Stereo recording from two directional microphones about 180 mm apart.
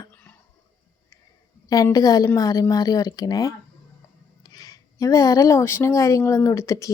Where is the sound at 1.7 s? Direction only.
20° left (ahead or behind).